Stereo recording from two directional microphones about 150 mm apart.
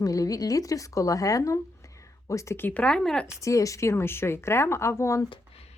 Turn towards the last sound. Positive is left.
turn(degrees=20)  # may be behind; listen again after turning